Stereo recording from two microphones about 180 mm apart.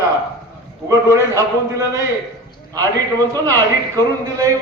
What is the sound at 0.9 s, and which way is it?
Speech, 15° right (ahead or behind).